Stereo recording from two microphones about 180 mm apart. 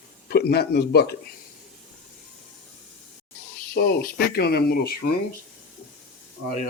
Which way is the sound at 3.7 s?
60° left (ahead or behind).